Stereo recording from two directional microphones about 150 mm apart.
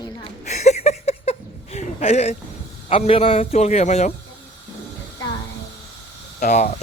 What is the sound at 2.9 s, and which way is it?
A man's voice, 40° left (ahead or behind).